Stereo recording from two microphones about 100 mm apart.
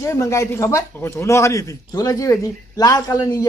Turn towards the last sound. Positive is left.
turn(degrees=40)  # may be behind; listen again after turning